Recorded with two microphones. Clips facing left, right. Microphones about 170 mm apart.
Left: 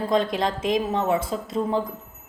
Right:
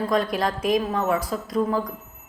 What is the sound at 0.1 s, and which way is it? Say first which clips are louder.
A woman's voice: left 3 dB; 25° left (ahead or behind).